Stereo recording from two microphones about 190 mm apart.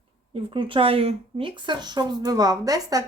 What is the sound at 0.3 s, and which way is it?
Speech, 25° right (ahead or behind).